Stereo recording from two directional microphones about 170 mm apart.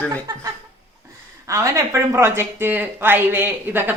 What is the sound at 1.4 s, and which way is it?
Speech, 20° right (ahead or behind).